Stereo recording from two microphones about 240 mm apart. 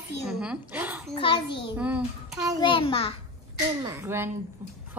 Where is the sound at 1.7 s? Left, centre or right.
Centre.